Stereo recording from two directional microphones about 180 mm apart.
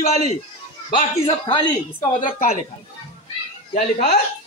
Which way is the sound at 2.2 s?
45° left (ahead or behind).